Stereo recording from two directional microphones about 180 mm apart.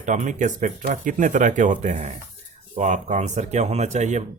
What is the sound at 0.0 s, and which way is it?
Speech, 45° right (ahead or behind).